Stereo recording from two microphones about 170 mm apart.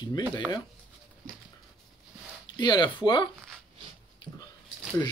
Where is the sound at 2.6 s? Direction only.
25° left (ahead or behind).